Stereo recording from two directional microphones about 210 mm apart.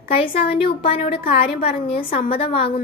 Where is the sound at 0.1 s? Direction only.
25° left (ahead or behind).